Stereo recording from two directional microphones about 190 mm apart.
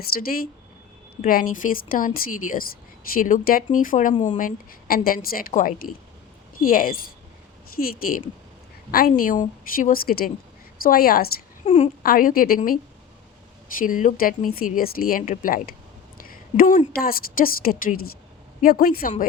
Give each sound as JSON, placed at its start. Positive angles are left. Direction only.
{"t": 0.1, "sound": "speech", "side_deg": 50}
{"t": 11.6, "sound": "a woman's voice", "side_deg": 30}
{"t": 12.0, "sound": "speech", "side_deg": 50}